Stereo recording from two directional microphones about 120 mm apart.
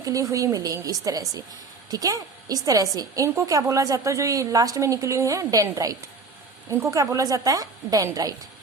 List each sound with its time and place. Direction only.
0.0 s a woman's voice: 30° right (ahead or behind)